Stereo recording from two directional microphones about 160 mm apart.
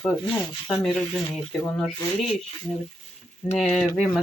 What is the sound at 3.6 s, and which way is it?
Speech, 5° left (ahead or behind).